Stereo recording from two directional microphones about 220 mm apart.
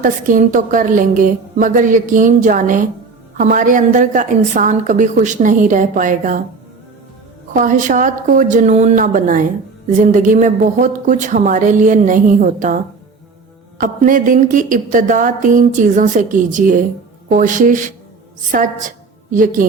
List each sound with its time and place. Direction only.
0.0 s a woman's voice: 35° right (ahead or behind)
7.5 s a woman's voice: 35° right (ahead or behind)